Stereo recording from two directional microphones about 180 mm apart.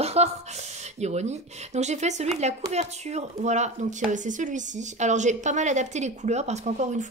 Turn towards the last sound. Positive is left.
turn(degrees=-40)  # may be behind; listen again after turning